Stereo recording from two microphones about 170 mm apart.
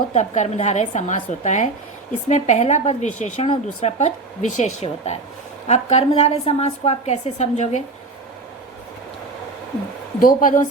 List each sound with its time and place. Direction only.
0.1 s a woman's voice: 40° left (ahead or behind)
10.2 s a woman's voice: 55° left (ahead or behind)